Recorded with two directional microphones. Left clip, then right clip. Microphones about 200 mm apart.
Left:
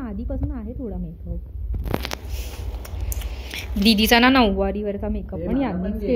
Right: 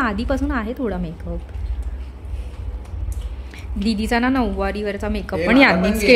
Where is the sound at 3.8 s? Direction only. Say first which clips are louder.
Left 4 dB; 5° left (ahead or behind).